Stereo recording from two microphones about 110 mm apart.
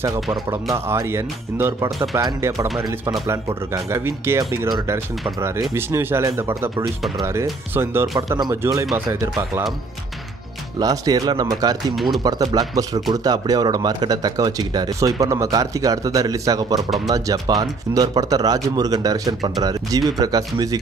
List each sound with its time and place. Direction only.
0.7 s speech: 25° right (ahead or behind)
5.8 s speech: 25° right (ahead or behind)
7.7 s speech: 20° right (ahead or behind)
8.2 s speech: 30° right (ahead or behind)
10.8 s speech: 35° right (ahead or behind)
11.9 s speech: centre (ahead or behind)
12.2 s speech: 35° right (ahead or behind)